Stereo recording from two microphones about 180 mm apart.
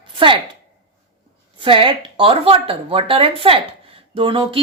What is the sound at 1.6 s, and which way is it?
Speech, 30° right (ahead or behind).